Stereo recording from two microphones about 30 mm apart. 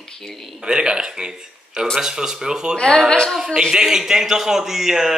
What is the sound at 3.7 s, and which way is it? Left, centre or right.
A man's voice, centre.